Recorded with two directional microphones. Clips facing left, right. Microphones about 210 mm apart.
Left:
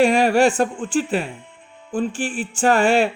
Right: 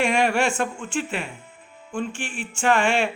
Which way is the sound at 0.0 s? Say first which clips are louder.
Left 6 dB; 35° left (ahead or behind).